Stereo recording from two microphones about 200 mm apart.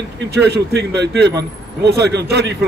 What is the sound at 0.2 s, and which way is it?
A man's voice, 55° right (ahead or behind).